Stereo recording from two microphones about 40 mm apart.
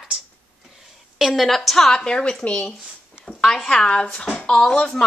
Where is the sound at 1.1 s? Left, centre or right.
Centre; by 2.3 s left.